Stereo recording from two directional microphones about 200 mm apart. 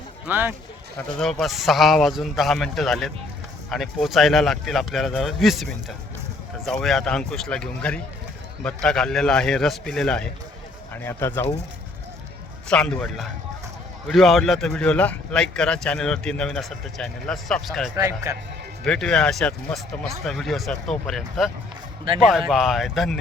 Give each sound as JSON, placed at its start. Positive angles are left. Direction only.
{"t": 0.3, "sound": "speech", "side_deg": -10}
{"t": 0.9, "sound": "speech", "side_deg": 5}
{"t": 12.6, "sound": "speech", "side_deg": 5}
{"t": 17.9, "sound": "speech", "side_deg": -15}
{"t": 18.9, "sound": "speech", "side_deg": 5}